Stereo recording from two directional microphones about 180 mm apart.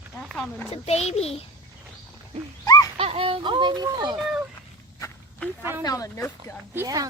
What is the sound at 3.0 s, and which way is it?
Speech, 30° right (ahead or behind).